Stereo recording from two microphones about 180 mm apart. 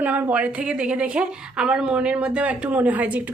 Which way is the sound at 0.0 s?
10° right (ahead or behind).